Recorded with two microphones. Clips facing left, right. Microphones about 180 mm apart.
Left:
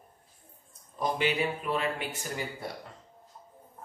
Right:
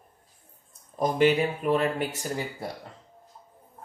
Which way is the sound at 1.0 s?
45° right (ahead or behind).